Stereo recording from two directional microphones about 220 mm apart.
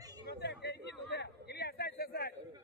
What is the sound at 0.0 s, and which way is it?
Chatter, 15° right (ahead or behind).